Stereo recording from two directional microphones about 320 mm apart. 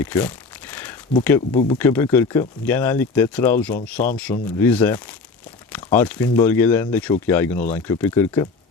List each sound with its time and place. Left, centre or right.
0.0 s crumpling: centre
1.5 s speech: centre